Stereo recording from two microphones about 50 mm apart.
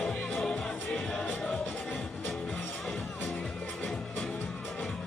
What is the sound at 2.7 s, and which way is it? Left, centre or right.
Music, centre.